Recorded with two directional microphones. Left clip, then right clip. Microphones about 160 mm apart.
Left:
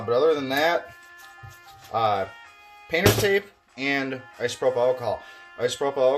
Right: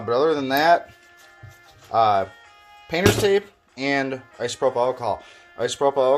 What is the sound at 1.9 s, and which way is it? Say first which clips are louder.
Speech: right 5 dB; 35° right (ahead or behind).